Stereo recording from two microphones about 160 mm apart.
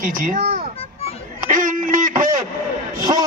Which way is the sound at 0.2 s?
45° right (ahead or behind).